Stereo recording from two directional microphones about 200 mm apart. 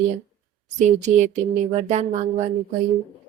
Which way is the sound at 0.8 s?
35° right (ahead or behind).